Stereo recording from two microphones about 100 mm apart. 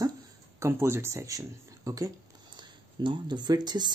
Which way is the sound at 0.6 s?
25° right (ahead or behind).